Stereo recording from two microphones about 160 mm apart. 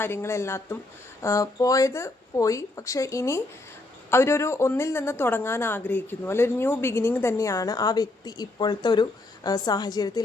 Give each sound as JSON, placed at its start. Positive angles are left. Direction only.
{"t": 0.0, "sound": "speech", "side_deg": 15}